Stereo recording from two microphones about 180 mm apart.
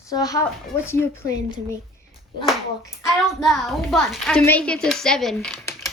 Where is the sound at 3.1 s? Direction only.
Centre (ahead or behind).